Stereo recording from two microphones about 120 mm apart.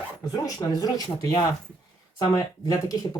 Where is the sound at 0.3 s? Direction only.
30° left (ahead or behind).